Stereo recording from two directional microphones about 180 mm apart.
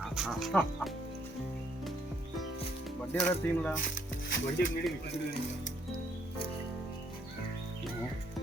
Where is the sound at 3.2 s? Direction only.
5° left (ahead or behind).